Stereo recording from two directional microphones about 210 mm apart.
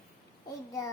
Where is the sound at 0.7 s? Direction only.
15° left (ahead or behind).